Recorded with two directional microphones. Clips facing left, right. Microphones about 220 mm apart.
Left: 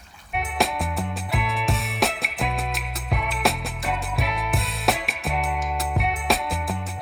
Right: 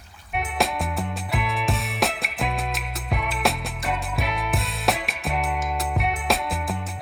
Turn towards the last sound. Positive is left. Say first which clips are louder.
# even
turn(degrees=0)  # may be behind; listen again after turning